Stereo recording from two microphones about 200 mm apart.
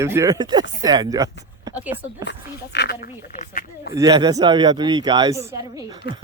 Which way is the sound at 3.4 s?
45° left (ahead or behind).